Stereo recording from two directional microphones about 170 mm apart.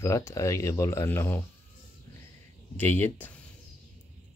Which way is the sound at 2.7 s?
10° left (ahead or behind).